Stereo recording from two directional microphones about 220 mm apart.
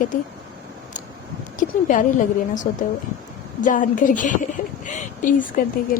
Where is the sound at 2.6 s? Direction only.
35° left (ahead or behind).